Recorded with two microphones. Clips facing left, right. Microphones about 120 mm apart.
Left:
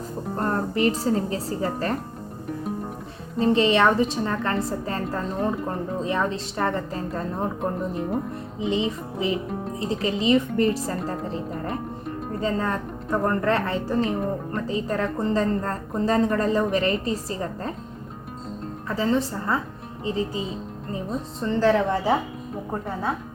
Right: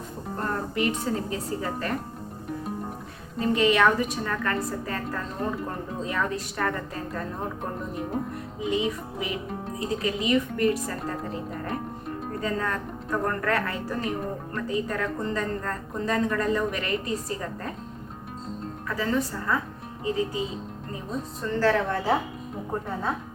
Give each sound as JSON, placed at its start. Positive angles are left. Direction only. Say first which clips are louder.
{"t": 0.3, "sound": "music", "louder": "left 4 dB", "side_deg": 35}
{"t": 1.0, "sound": "a woman's voice", "louder": "left 5 dB", "side_deg": 30}
{"t": 3.3, "sound": "a woman's voice", "louder": "left 3 dB", "side_deg": 30}
{"t": 6.1, "sound": "a woman's voice", "louder": "left 2 dB", "side_deg": 25}
{"t": 8.6, "sound": "a woman's voice", "louder": "left 2 dB", "side_deg": 25}
{"t": 18.9, "sound": "a woman's voice", "louder": "left 4 dB", "side_deg": 30}
{"t": 21.4, "sound": "a woman's voice", "louder": "left 3 dB", "side_deg": 20}